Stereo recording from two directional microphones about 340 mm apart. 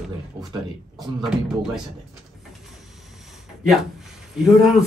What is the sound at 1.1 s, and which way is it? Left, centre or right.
Speech, centre.